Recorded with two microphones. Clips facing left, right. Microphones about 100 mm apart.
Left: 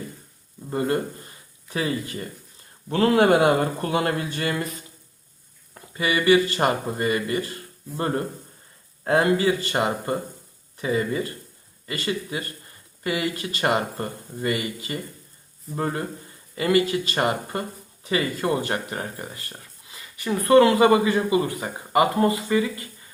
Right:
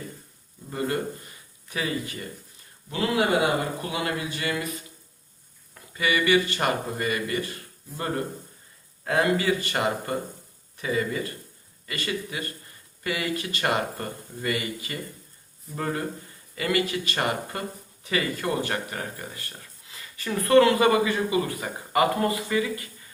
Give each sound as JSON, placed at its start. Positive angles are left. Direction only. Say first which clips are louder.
{"t": 0.7, "sound": "speech", "louder": "left 4 dB", "side_deg": 30}
{"t": 2.9, "sound": "a man's voice", "louder": "left 6 dB", "side_deg": 50}
{"t": 5.7, "sound": "speech", "louder": "left 1 dB", "side_deg": 30}